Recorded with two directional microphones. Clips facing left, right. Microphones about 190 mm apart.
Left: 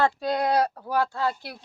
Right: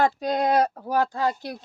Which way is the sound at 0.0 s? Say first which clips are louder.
Right 1 dB; 20° right (ahead or behind).